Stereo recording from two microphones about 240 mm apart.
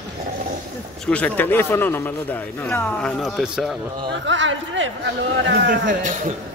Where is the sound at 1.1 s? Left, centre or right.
Centre.